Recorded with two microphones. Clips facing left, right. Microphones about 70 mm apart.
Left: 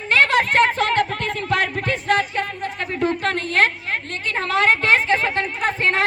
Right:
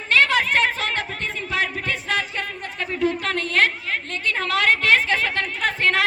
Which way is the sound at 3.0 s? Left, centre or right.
Left.